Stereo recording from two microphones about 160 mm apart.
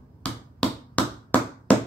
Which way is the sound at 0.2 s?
10° left (ahead or behind).